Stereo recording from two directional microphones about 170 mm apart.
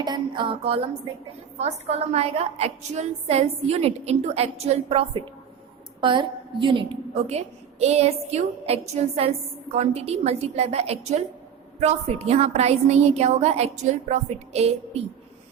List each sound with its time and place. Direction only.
0.0 s a woman's voice: 25° right (ahead or behind)